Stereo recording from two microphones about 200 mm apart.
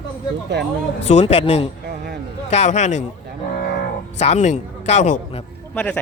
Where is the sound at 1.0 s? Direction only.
30° left (ahead or behind).